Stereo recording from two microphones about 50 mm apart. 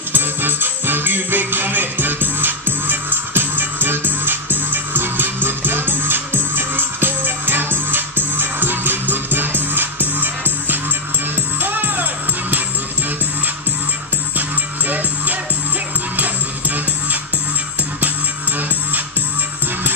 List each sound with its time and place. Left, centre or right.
0.1 s music: right
14.9 s music: right